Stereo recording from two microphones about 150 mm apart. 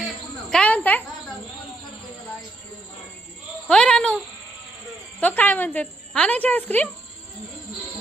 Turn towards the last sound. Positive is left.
turn(degrees=10)  # may be behind; listen again after turning